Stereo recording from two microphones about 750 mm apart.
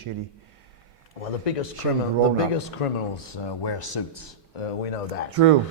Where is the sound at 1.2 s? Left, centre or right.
Left.